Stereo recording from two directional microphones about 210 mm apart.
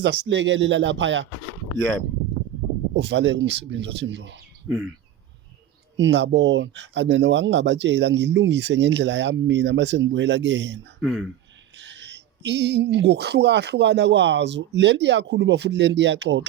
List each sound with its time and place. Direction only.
0.0 s speech: 55° right (ahead or behind)
2.9 s speech: 55° right (ahead or behind)
6.0 s speech: 55° right (ahead or behind)
11.0 s speech: centre (ahead or behind)
11.8 s speech: 55° right (ahead or behind)